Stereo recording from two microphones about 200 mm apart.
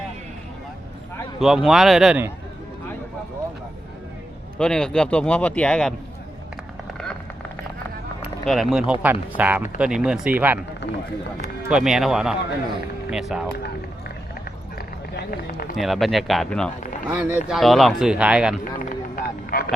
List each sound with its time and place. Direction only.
1.4 s speech: centre (ahead or behind)
4.5 s speech: 5° left (ahead or behind)
8.2 s run: centre (ahead or behind)
8.9 s speech: 5° right (ahead or behind)
11.7 s speech: centre (ahead or behind)
14.8 s a sound: 50° left (ahead or behind)
15.7 s speech: centre (ahead or behind)
17.1 s speech: 10° right (ahead or behind)
18.8 s a sound: 45° left (ahead or behind)